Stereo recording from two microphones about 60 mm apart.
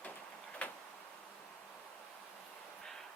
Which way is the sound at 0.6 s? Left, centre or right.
Left.